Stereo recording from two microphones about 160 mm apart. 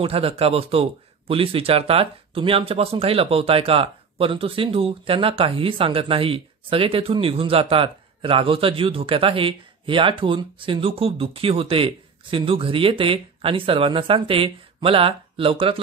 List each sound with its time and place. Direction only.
0.0 s speech: 40° right (ahead or behind)